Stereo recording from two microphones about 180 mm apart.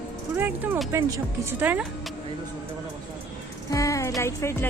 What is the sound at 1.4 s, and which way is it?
Speech, 10° right (ahead or behind).